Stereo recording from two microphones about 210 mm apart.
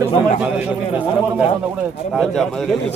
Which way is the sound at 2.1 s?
Centre (ahead or behind).